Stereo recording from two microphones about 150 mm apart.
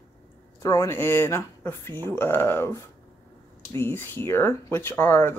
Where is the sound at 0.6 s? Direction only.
20° left (ahead or behind).